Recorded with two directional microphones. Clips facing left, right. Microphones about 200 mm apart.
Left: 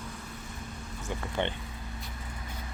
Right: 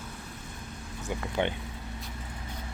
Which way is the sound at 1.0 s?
10° right (ahead or behind).